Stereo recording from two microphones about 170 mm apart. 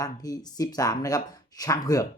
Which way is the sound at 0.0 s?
20° left (ahead or behind).